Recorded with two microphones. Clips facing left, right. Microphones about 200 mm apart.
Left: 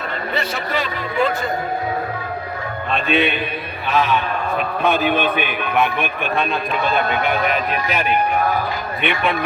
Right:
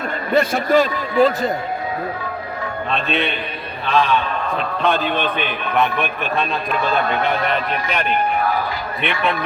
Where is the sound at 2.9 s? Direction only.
Centre (ahead or behind).